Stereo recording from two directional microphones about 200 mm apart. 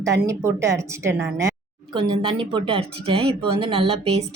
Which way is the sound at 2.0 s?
25° right (ahead or behind).